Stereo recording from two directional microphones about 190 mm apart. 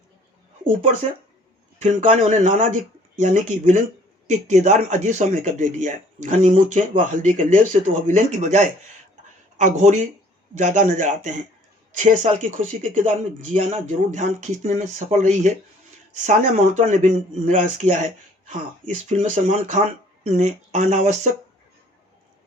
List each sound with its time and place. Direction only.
1.8 s speech: 40° right (ahead or behind)
19.0 s speech: 40° right (ahead or behind)